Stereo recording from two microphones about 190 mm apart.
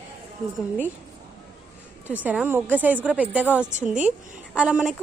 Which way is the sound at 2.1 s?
5° right (ahead or behind).